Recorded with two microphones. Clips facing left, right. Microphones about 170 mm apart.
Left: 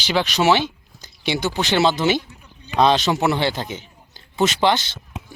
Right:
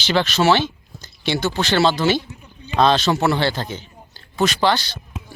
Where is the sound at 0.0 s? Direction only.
10° left (ahead or behind).